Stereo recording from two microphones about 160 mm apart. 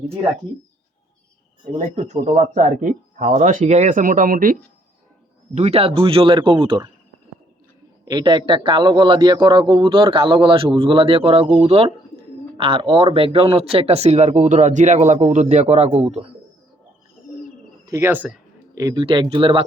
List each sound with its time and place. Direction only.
2.0 s speech: 45° right (ahead or behind)
5.5 s a man's voice: 40° right (ahead or behind)
8.0 s a man's voice: 25° right (ahead or behind)
17.8 s a sound: 15° right (ahead or behind)
18.8 s a man's voice: 20° right (ahead or behind)